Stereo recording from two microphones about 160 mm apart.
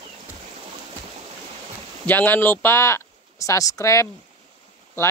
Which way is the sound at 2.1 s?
10° left (ahead or behind).